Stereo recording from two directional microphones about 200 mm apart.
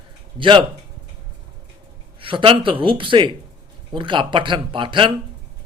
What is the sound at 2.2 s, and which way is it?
Speech, 25° right (ahead or behind).